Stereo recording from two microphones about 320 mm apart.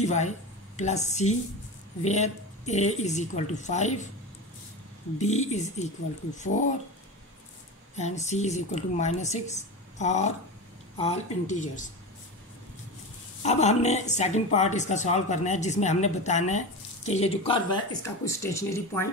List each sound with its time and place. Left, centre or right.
0.0 s speech: left
5.2 s speech: left
7.9 s speech: left
13.4 s speech: left